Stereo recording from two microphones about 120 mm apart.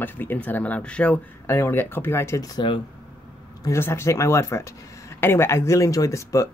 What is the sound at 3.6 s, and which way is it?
Speech, 20° left (ahead or behind).